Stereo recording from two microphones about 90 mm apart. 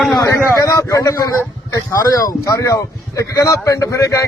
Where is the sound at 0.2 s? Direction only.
35° left (ahead or behind).